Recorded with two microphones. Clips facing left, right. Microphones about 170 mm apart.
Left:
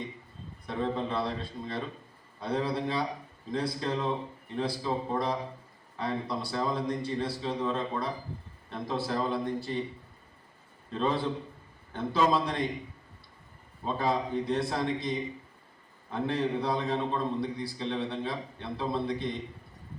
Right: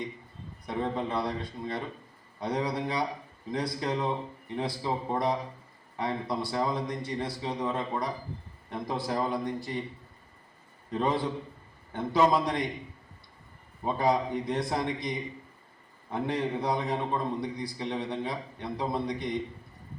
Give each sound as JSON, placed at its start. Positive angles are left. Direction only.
{"t": 0.7, "sound": "a man's voice", "side_deg": -20}
{"t": 10.9, "sound": "a man's voice", "side_deg": -15}
{"t": 13.8, "sound": "a man's voice", "side_deg": -15}
{"t": 16.1, "sound": "a man's voice", "side_deg": -15}